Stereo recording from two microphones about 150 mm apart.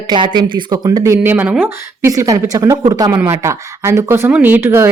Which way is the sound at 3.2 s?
15° right (ahead or behind).